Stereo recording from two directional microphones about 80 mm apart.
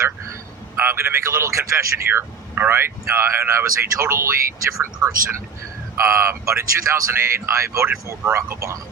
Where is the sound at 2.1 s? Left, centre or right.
Right.